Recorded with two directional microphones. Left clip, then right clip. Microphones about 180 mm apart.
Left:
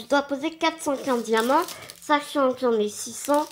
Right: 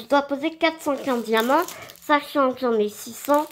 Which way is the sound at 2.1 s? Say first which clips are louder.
Right 2 dB; 20° right (ahead or behind).